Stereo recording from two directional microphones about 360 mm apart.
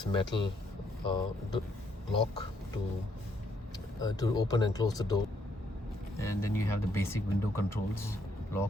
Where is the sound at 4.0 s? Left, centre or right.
Centre.